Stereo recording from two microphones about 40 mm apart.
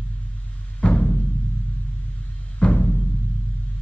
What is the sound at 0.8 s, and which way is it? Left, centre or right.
Music, left.